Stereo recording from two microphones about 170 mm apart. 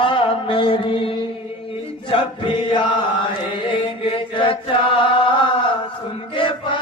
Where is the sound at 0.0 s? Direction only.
30° left (ahead or behind).